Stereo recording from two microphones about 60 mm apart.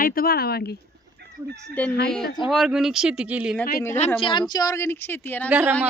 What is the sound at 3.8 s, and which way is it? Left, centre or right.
Speech, left.